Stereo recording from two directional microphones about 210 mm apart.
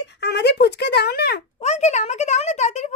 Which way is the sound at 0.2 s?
55° left (ahead or behind).